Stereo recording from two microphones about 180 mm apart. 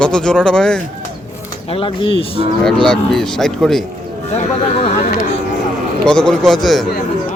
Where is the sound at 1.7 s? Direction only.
30° left (ahead or behind).